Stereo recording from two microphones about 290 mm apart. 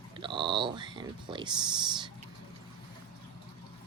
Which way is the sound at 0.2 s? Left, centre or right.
Centre.